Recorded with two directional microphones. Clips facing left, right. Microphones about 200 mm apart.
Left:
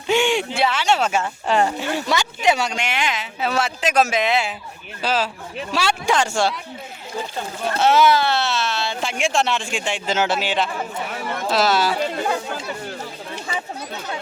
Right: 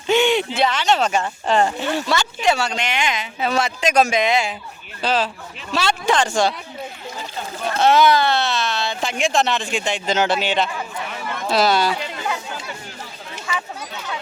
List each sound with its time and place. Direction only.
0.1 s speech: 5° left (ahead or behind)
7.6 s speech: 5° left (ahead or behind)
11.9 s speech: 40° left (ahead or behind)